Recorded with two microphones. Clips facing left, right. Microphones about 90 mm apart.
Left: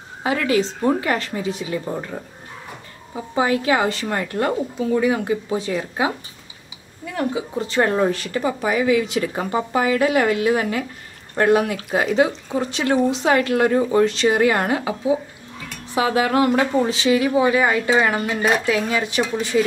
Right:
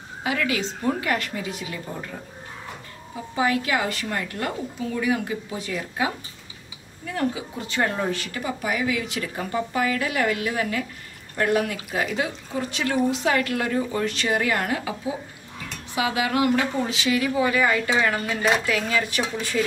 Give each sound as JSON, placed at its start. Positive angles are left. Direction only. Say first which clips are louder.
{"t": 0.2, "sound": "a woman's voice", "louder": "left 6 dB", "side_deg": 35}
{"t": 3.3, "sound": "a woman's voice", "louder": "left 4 dB", "side_deg": 30}
{"t": 7.2, "sound": "a woman's voice", "louder": "left 4 dB", "side_deg": 30}
{"t": 9.3, "sound": "a woman's voice", "louder": "left 5 dB", "side_deg": 40}
{"t": 9.8, "sound": "speech", "louder": "left 6 dB", "side_deg": 25}
{"t": 15.9, "sound": "speech", "louder": "left 5 dB", "side_deg": 40}